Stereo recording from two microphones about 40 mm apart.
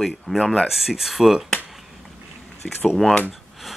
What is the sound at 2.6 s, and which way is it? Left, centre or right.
Speech, left.